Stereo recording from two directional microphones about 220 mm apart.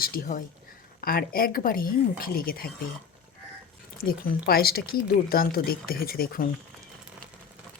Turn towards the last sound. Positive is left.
turn(degrees=40)  # may be behind; listen again after turning